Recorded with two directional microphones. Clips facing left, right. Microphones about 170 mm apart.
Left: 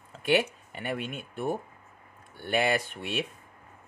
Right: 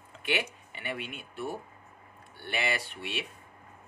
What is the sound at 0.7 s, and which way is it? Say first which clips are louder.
Speech: left 5 dB; 45° left (ahead or behind).